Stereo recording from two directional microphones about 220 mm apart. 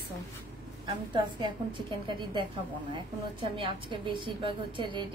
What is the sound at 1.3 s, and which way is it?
A woman's voice, 20° right (ahead or behind).